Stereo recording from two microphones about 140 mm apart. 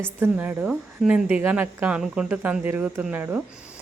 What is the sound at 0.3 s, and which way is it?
A woman's voice, 10° right (ahead or behind).